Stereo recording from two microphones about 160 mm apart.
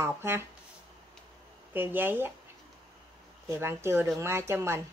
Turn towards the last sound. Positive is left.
turn(degrees=-15)  # may be behind; listen again after turning